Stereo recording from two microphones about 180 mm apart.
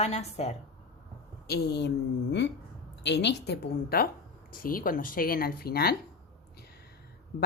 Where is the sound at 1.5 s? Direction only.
65° left (ahead or behind).